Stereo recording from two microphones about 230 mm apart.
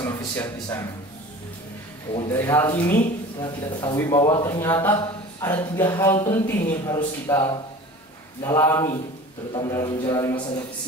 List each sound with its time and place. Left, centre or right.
0.0 s speech: centre
2.3 s a man's voice: centre